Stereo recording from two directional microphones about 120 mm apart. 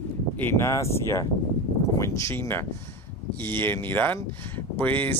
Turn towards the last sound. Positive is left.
turn(degrees=15)  # may be behind; listen again after turning